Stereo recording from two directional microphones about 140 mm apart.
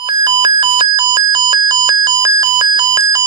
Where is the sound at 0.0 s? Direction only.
30° right (ahead or behind).